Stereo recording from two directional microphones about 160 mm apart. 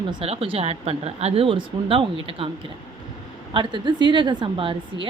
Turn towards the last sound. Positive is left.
turn(degrees=-35)  # may be behind; listen again after turning